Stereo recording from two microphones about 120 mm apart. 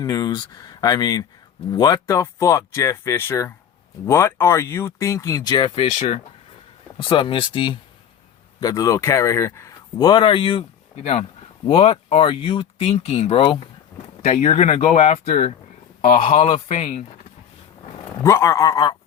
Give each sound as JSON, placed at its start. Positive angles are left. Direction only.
{"t": 0.0, "sound": "speech", "side_deg": 35}
{"t": 5.5, "sound": "speech", "side_deg": 45}
{"t": 8.6, "sound": "speech", "side_deg": 30}
{"t": 11.0, "sound": "speech", "side_deg": 70}
{"t": 11.6, "sound": "speech", "side_deg": 55}
{"t": 12.9, "sound": "speech", "side_deg": 60}
{"t": 14.3, "sound": "speech", "side_deg": 65}
{"t": 18.2, "sound": "speech", "side_deg": 20}